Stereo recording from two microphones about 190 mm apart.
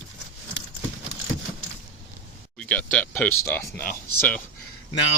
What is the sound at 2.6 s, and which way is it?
Speech, 5° left (ahead or behind).